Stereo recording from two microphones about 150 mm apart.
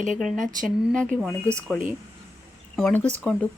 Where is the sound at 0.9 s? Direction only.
5° left (ahead or behind).